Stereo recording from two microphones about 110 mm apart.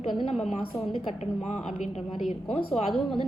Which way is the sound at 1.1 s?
75° left (ahead or behind).